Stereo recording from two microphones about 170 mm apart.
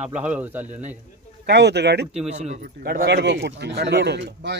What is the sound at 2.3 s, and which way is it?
Speech, 40° right (ahead or behind).